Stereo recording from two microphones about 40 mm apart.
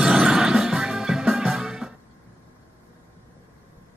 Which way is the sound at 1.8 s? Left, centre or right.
Right.